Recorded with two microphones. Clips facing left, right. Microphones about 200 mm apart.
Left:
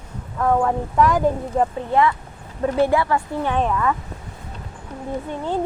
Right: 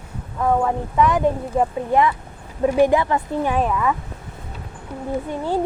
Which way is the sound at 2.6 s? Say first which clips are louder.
Right 2 dB; 15° right (ahead or behind).